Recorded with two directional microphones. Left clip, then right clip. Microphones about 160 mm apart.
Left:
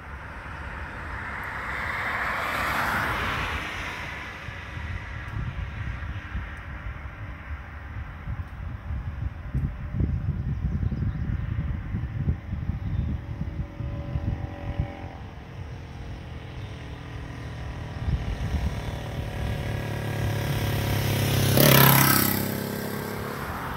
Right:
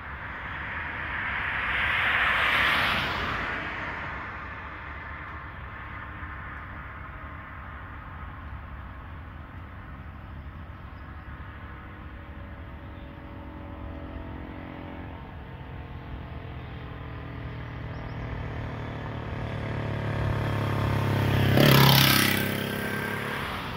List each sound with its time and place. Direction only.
0.3 s vehicle: 30° left (ahead or behind); by 2.8 s 10° right (ahead or behind)
3.0 s a sound: 70° right (ahead or behind)
3.5 s a sound: 40° right (ahead or behind)
19.3 s vehicle: 25° right (ahead or behind)
21.6 s vehicle: 55° right (ahead or behind)
22.2 s vehicle: centre (ahead or behind)
22.6 s vehicle: 20° left (ahead or behind)